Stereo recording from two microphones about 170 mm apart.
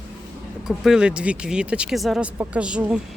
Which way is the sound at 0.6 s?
5° right (ahead or behind).